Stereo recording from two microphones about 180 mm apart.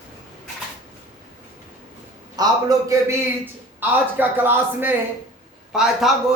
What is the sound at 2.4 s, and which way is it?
Speech, 20° right (ahead or behind).